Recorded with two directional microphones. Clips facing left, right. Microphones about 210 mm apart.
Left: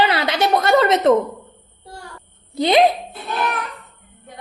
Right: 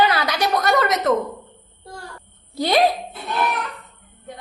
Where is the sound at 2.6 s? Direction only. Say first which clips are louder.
Left 4 dB; 20° left (ahead or behind).